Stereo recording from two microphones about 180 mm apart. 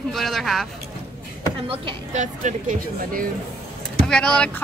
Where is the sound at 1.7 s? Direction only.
35° right (ahead or behind).